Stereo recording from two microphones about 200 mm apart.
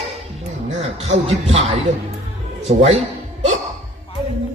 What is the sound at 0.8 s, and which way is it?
Speech, 30° right (ahead or behind).